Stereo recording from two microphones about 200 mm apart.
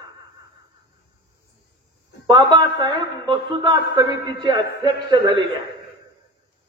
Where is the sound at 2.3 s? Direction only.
25° right (ahead or behind).